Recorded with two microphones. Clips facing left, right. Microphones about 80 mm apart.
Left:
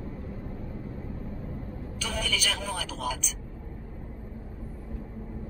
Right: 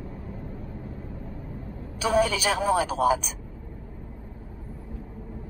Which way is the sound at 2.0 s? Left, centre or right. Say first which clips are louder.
Right 10 dB; right.